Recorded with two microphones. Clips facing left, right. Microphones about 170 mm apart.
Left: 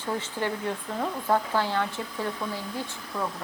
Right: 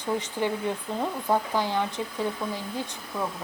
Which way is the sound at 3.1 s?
5° right (ahead or behind).